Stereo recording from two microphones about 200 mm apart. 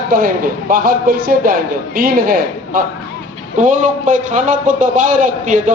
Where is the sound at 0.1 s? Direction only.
45° right (ahead or behind).